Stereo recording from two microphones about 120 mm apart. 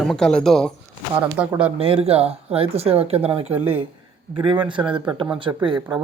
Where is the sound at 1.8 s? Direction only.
55° right (ahead or behind).